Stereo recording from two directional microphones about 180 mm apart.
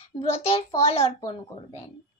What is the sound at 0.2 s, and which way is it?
A child's voice, 35° left (ahead or behind).